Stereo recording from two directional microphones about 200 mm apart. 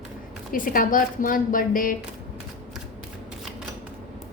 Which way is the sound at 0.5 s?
45° left (ahead or behind).